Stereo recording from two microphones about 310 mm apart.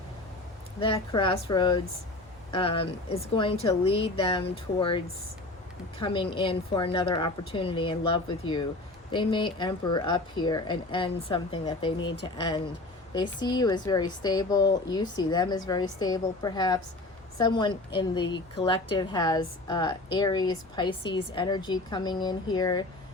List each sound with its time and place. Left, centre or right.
0.8 s a woman's voice: centre